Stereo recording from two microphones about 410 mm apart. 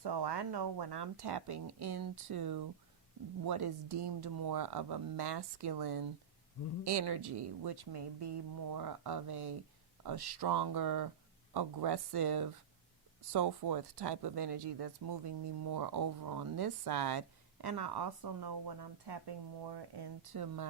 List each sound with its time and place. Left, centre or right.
0.0 s speech: right